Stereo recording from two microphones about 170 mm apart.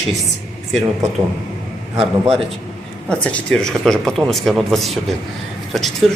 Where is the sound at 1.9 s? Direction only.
35° right (ahead or behind).